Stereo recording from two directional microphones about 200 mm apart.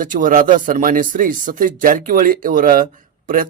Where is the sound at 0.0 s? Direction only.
40° right (ahead or behind).